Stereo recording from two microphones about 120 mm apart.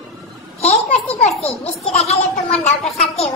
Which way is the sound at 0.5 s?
65° left (ahead or behind).